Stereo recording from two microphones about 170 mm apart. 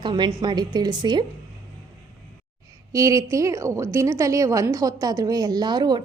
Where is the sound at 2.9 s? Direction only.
20° right (ahead or behind).